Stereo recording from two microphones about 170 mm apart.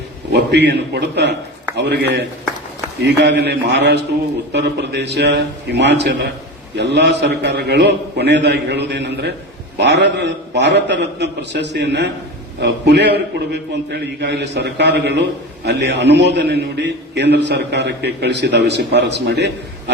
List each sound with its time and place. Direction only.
0.3 s a man's voice: 80° right